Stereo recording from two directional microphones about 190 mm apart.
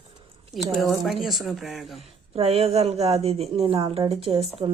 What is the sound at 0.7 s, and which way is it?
Speech, centre (ahead or behind).